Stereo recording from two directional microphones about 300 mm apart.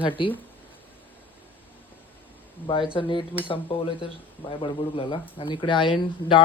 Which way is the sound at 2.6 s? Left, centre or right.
Centre.